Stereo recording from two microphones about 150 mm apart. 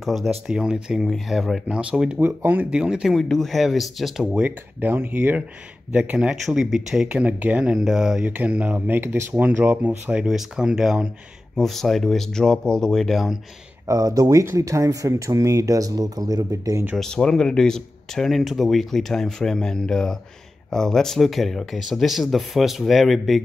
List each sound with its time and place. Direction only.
0.0 s speech: centre (ahead or behind)
13.8 s speech: 25° right (ahead or behind)
17.0 s speech: 5° left (ahead or behind)